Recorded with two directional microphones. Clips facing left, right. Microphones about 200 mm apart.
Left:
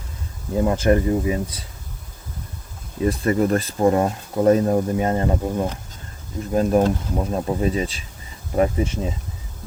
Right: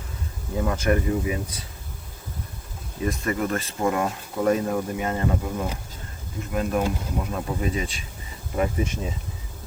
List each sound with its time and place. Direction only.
0.5 s speech: 30° left (ahead or behind)
3.0 s speech: 35° left (ahead or behind)